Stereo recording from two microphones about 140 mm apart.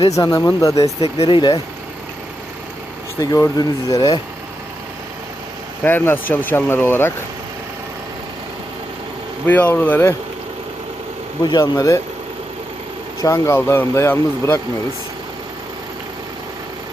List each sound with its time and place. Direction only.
0.2 s speech: 25° left (ahead or behind)
1.0 s speech: 40° left (ahead or behind)
3.2 s speech: 25° left (ahead or behind)
5.8 s speech: 15° left (ahead or behind)
9.5 s speech: 10° left (ahead or behind)
11.7 s speech: 25° left (ahead or behind)
13.2 s speech: 20° left (ahead or behind)